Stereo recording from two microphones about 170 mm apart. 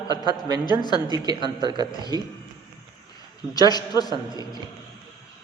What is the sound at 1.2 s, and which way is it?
A man's voice, 25° right (ahead or behind).